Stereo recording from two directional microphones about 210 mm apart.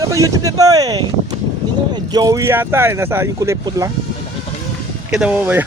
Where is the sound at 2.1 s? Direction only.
15° right (ahead or behind).